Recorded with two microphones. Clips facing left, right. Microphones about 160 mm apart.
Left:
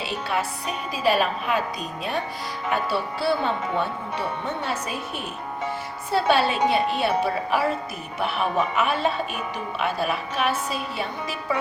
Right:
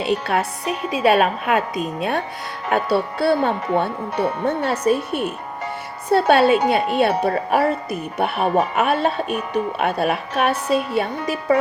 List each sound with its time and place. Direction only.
0.3 s speech: 60° right (ahead or behind)
6.1 s speech: 55° right (ahead or behind)
6.5 s speech: centre (ahead or behind)
7.0 s speech: 60° right (ahead or behind)
8.2 s speech: 45° right (ahead or behind)
10.5 s speech: centre (ahead or behind)
10.9 s speech: 60° right (ahead or behind)